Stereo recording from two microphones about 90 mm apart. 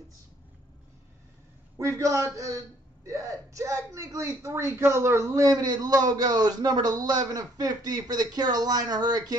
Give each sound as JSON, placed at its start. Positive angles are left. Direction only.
{"t": 1.8, "sound": "speech", "side_deg": -35}